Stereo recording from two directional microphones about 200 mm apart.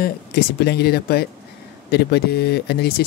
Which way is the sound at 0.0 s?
55° left (ahead or behind).